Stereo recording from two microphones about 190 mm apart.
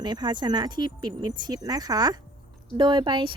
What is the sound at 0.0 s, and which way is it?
A woman's voice, 20° right (ahead or behind).